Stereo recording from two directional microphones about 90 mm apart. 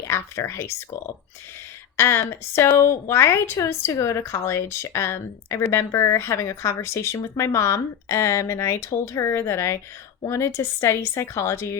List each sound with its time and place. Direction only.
0.1 s a woman's voice: 35° left (ahead or behind)